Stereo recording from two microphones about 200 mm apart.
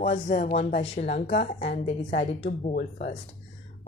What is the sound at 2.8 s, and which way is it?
Speech, 50° left (ahead or behind).